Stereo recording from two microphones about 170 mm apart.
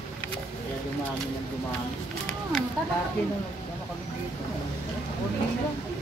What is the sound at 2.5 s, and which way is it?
Speech, centre (ahead or behind).